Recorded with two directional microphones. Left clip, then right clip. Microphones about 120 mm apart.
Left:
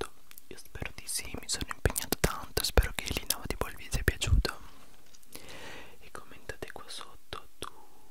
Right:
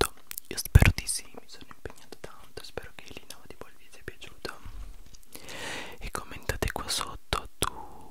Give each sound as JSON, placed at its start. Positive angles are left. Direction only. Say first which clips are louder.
{"t": 0.0, "sound": "whispering", "louder": "right 11 dB", "side_deg": -25}
{"t": 1.2, "sound": "whispering", "louder": "left 10 dB", "side_deg": 25}
{"t": 5.3, "sound": "a sound", "louder": "right 4 dB", "side_deg": -10}
{"t": 5.6, "sound": "whispering", "louder": "right 9 dB", "side_deg": -25}